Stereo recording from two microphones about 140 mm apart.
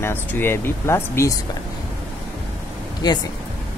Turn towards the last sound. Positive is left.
turn(degrees=30)  # may be behind; listen again after turning